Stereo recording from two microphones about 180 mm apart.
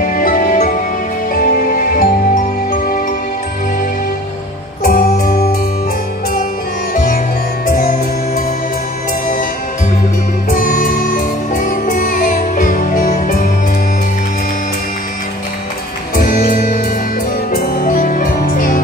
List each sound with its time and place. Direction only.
0.1 s music: 50° left (ahead or behind)
4.8 s music: 50° left (ahead or behind)
7.6 s music: 50° left (ahead or behind)
10.5 s music: 45° left (ahead or behind)
16.2 s music: 55° left (ahead or behind)